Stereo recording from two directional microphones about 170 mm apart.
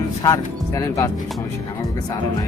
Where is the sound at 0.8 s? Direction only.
20° left (ahead or behind).